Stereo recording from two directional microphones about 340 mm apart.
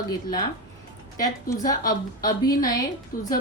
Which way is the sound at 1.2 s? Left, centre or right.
Centre.